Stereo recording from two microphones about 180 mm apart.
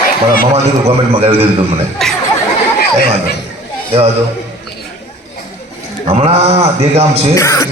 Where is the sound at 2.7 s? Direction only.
55° left (ahead or behind).